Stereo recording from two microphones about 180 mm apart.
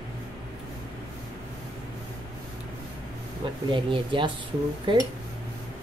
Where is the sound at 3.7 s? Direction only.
25° right (ahead or behind).